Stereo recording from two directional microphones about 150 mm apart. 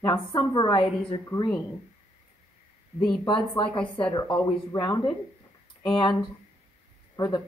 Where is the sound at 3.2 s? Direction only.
35° left (ahead or behind).